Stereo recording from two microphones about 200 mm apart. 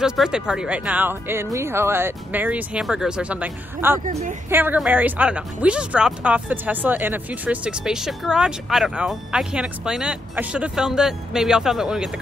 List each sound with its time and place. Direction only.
0.0 s speech: 5° right (ahead or behind)
4.0 s a woman's voice: 35° right (ahead or behind)
4.5 s a woman's voice: 10° right (ahead or behind)